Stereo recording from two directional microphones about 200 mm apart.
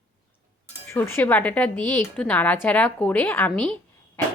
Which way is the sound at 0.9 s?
10° left (ahead or behind).